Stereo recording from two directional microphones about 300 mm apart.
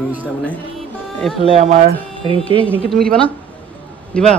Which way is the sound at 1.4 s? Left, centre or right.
Right.